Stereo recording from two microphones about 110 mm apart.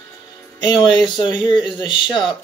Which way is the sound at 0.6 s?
45° left (ahead or behind).